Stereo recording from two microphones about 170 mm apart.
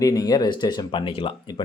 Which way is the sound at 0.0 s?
20° left (ahead or behind).